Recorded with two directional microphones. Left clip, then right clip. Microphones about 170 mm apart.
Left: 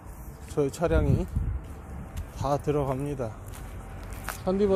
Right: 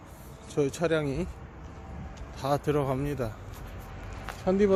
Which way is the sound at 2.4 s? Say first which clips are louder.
Even; 15° right (ahead or behind).